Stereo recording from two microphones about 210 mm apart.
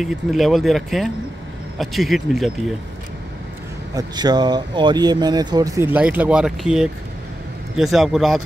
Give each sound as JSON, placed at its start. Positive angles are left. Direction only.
{"t": 0.0, "sound": "speech", "side_deg": 0}
{"t": 3.9, "sound": "speech", "side_deg": -20}